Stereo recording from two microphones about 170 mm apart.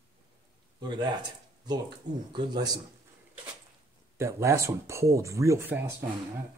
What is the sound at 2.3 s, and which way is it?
Speech, 25° right (ahead or behind).